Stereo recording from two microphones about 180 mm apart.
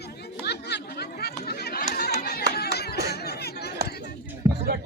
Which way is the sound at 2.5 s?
60° left (ahead or behind).